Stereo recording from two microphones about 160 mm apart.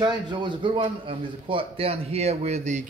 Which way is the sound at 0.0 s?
25° right (ahead or behind).